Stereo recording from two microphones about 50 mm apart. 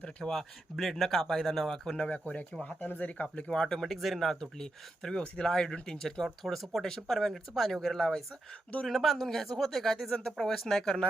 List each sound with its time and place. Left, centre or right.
0.3 s speech: centre
2.0 s speech: left
3.8 s speech: centre